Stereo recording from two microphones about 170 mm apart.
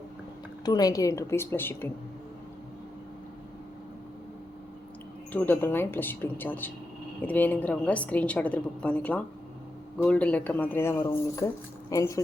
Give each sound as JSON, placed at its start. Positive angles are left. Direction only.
{"t": 0.6, "sound": "a woman's voice", "side_deg": 25}
{"t": 5.3, "sound": "a woman's voice", "side_deg": 10}